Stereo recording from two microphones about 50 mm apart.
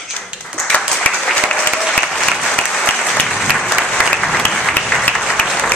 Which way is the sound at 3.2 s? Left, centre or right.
Centre.